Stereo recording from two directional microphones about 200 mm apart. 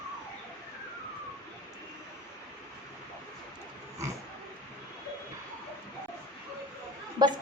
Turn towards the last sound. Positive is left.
turn(degrees=-20)  # may be behind; listen again after turning